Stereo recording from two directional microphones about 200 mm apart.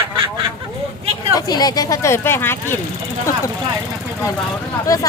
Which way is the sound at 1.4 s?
20° left (ahead or behind).